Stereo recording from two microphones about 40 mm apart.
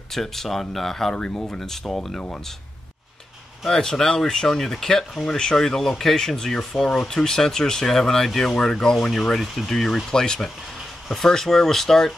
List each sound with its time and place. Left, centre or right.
0.1 s speech: centre
1.1 s speech: left
1.6 s speech: centre
3.6 s speech: centre